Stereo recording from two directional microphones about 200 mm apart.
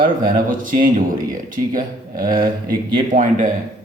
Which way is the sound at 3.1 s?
40° right (ahead or behind).